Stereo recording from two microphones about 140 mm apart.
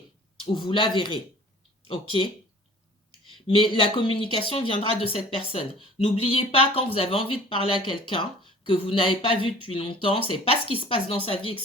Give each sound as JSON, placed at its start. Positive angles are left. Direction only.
{"t": 0.5, "sound": "speech", "side_deg": 35}
{"t": 3.3, "sound": "speech", "side_deg": 35}